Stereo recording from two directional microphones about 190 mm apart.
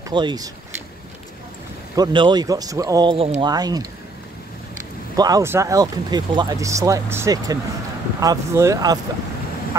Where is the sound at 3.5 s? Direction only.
20° right (ahead or behind).